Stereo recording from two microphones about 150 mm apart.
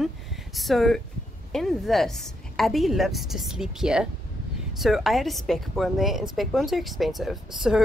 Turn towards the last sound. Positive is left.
turn(degrees=-5)  # may be behind; listen again after turning